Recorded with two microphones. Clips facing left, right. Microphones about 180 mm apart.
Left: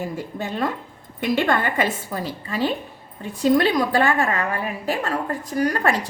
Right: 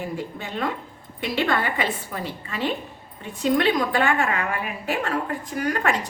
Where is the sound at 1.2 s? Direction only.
50° left (ahead or behind).